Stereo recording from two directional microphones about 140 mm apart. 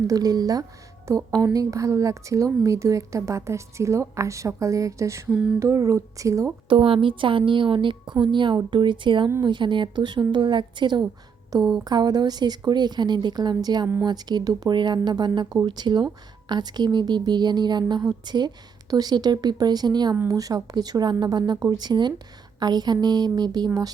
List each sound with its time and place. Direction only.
0.1 s a woman's voice: 25° right (ahead or behind)
5.3 s a sound: 5° right (ahead or behind)
5.5 s a woman's voice: 20° right (ahead or behind)
6.7 s a woman's voice: 40° right (ahead or behind)